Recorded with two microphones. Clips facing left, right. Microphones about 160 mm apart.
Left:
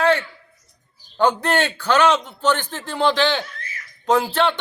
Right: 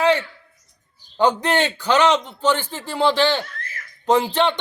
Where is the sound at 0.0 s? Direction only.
15° right (ahead or behind).